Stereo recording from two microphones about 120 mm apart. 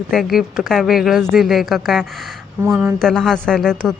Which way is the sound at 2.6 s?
20° right (ahead or behind).